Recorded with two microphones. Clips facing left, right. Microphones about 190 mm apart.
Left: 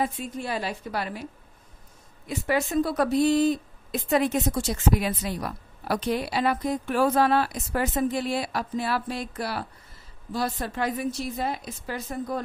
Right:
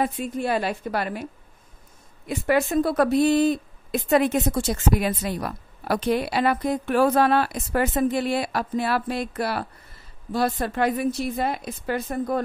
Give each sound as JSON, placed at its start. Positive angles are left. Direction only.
{"t": 0.0, "sound": "a woman's voice", "side_deg": -60}
{"t": 2.2, "sound": "a woman's voice", "side_deg": -60}